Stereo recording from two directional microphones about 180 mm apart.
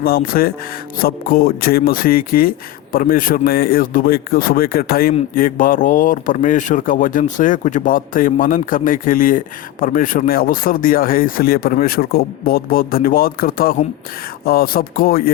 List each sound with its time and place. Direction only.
0.0 s speech: 55° left (ahead or behind)